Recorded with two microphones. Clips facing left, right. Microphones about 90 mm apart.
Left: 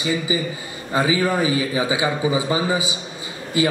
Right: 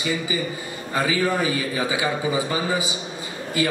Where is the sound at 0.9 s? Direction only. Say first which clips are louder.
Left 3 dB; 20° left (ahead or behind).